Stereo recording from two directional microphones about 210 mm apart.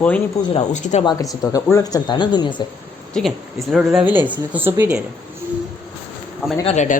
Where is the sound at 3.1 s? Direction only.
Centre (ahead or behind).